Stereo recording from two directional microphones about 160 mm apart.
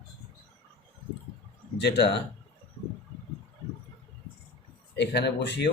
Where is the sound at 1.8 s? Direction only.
90° left.